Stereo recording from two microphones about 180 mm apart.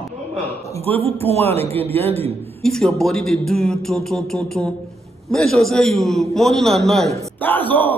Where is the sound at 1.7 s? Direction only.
10° left (ahead or behind).